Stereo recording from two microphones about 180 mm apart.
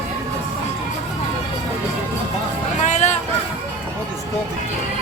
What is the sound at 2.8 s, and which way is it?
Vehicle, 40° left (ahead or behind).